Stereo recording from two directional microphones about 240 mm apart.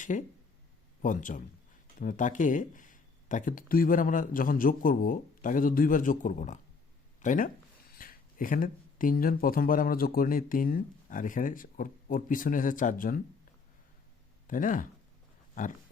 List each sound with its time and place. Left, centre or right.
0.0 s speech: left
14.4 s speech: left